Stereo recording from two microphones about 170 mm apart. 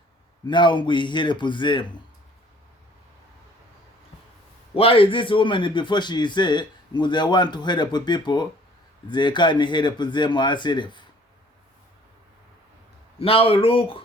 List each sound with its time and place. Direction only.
0.4 s a man's voice: 25° left (ahead or behind)
4.7 s a man's voice: 35° left (ahead or behind)
13.1 s speech: 35° left (ahead or behind)